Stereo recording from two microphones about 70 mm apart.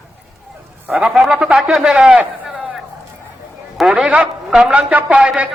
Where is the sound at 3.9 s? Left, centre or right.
Centre.